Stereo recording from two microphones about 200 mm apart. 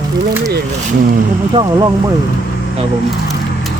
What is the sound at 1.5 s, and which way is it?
Speech, 20° right (ahead or behind).